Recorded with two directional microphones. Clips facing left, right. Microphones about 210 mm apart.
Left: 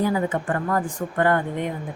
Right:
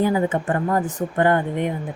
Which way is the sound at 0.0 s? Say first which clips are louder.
Right 3 dB; 25° right (ahead or behind).